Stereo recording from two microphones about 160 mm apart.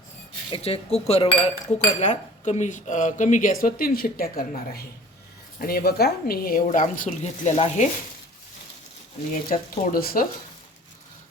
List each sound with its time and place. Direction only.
0.5 s a woman's voice: 35° left (ahead or behind)
9.5 s a woman's voice: 65° left (ahead or behind)